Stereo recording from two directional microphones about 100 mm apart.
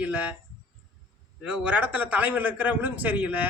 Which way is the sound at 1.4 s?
10° right (ahead or behind).